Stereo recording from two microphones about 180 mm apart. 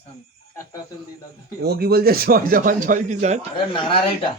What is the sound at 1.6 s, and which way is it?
A man's voice, 60° right (ahead or behind).